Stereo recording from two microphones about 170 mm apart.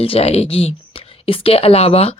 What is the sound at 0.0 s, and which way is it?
Speech, 35° left (ahead or behind).